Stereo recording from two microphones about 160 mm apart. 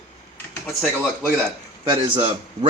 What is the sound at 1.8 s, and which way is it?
Speech, 35° right (ahead or behind).